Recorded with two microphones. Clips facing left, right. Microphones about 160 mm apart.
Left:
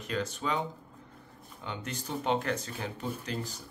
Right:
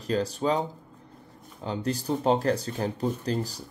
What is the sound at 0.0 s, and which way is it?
Speech, 35° right (ahead or behind).